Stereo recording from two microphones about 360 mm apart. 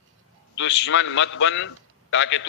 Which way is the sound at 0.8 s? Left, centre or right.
Left.